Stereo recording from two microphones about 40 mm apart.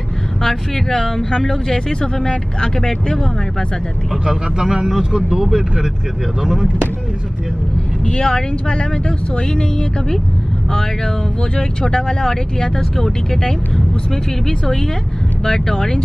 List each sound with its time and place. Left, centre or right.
0.4 s speech: centre
1.7 s speech: centre
4.3 s speech: centre
8.0 s speech: left
11.5 s speech: centre
15.4 s speech: centre